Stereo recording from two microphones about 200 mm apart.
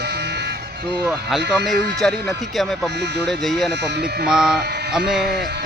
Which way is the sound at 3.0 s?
60° right (ahead or behind).